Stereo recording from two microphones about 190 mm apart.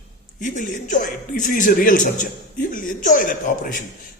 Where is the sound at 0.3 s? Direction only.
45° left (ahead or behind).